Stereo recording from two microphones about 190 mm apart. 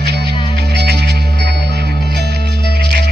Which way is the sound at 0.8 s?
60° right (ahead or behind).